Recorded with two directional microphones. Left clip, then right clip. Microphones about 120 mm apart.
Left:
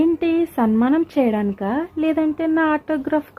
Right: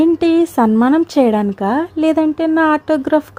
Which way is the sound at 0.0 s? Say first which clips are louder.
Right 6 dB; 60° right (ahead or behind).